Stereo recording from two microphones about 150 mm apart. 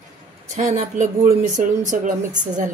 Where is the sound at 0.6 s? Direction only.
55° right (ahead or behind).